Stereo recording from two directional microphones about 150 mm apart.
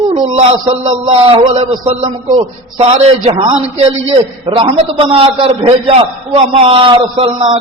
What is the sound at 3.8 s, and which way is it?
A man's voice, 40° right (ahead or behind).